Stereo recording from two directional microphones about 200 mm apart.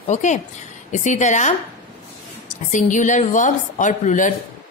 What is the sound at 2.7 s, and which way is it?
A woman's voice, 40° left (ahead or behind).